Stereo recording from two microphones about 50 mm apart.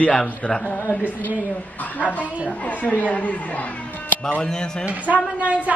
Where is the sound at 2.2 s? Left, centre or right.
Right.